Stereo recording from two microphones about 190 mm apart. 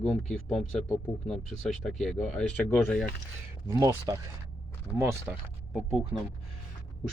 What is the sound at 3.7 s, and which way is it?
Speech, 15° right (ahead or behind).